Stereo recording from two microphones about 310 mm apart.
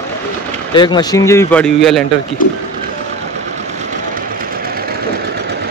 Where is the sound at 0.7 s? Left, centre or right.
Centre.